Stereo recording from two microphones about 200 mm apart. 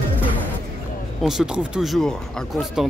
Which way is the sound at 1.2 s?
5° right (ahead or behind).